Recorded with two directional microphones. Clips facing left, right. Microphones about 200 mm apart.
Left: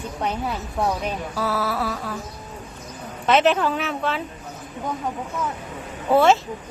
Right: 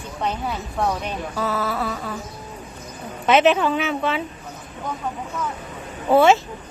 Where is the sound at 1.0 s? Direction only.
5° left (ahead or behind).